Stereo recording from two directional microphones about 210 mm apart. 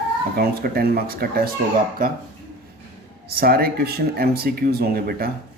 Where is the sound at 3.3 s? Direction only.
45° right (ahead or behind).